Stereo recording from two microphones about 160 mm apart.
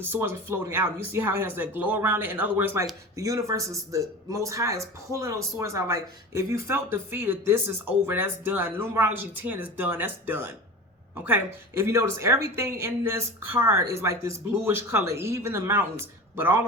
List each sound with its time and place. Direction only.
0.0 s speech: 15° right (ahead or behind)
11.8 s speech: 15° right (ahead or behind)